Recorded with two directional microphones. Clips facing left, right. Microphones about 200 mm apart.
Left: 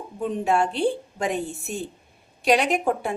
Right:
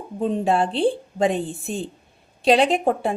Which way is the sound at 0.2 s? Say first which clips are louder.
Right 2 dB; 30° right (ahead or behind).